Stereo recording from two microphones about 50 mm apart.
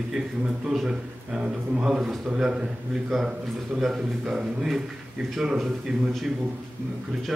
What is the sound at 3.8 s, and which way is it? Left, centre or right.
Speech, centre.